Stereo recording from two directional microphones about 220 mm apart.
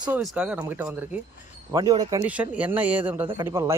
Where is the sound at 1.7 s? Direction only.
20° right (ahead or behind).